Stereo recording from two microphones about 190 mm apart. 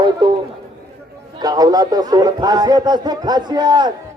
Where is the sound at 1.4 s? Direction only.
20° right (ahead or behind).